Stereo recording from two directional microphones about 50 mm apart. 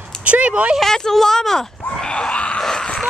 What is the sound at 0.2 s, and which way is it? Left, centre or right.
Speech, right.